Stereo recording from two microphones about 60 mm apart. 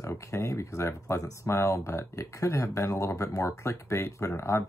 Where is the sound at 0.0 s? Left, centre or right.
Left.